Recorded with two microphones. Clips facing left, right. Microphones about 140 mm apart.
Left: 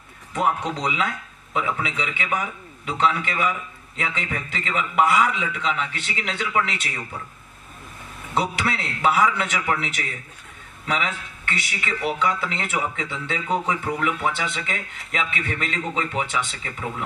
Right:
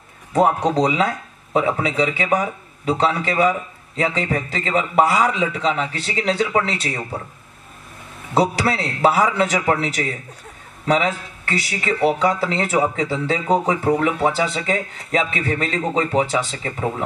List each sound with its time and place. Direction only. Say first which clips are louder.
0.3 s speech: right 7 dB; 40° right (ahead or behind)
8.4 s speech: right 6 dB; 35° right (ahead or behind)